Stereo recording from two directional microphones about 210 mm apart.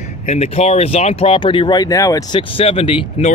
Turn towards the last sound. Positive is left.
turn(degrees=25)  # may be behind; listen again after turning